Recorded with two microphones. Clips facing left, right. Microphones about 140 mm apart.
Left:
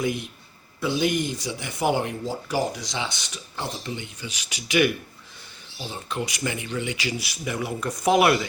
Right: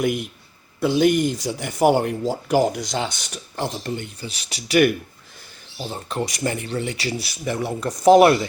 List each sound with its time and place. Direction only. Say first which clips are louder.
0.8 s speech: right 6 dB; 55° right (ahead or behind)
4.2 s speech: right 3 dB; 35° right (ahead or behind)
5.8 s speech: right 4 dB; 40° right (ahead or behind)